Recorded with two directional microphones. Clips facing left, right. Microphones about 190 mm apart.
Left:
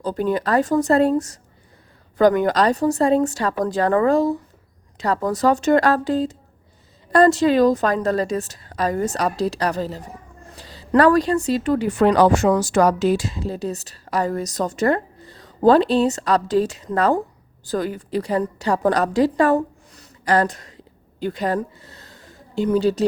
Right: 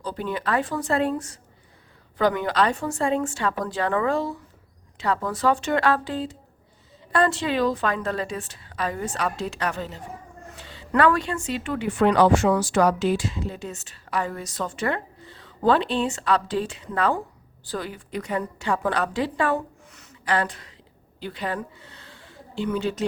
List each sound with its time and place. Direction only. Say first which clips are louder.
0.0 s a woman's voice: left 7 dB; 45° left (ahead or behind)